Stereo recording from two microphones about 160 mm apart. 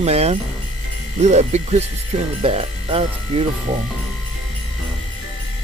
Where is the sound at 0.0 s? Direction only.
40° right (ahead or behind).